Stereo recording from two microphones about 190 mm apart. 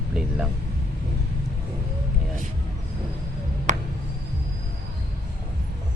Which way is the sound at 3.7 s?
40° right (ahead or behind).